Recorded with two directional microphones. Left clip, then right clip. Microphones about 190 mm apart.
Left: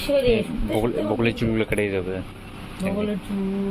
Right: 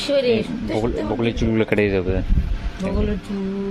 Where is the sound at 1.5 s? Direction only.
25° right (ahead or behind).